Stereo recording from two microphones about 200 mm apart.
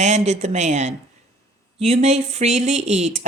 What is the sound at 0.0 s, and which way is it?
Speech, 35° right (ahead or behind).